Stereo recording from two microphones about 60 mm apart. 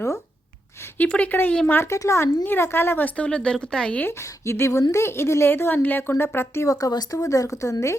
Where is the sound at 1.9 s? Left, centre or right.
Left.